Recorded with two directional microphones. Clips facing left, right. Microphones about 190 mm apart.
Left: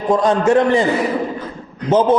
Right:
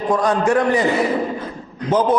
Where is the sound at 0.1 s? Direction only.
25° left (ahead or behind).